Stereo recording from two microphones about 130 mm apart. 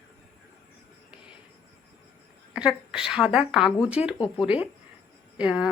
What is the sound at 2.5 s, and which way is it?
Speech, 5° right (ahead or behind).